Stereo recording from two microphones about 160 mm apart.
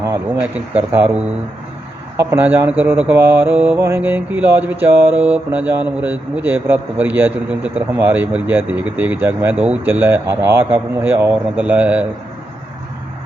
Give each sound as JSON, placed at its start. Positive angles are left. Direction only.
{"t": 0.3, "sound": "mantra", "side_deg": -10}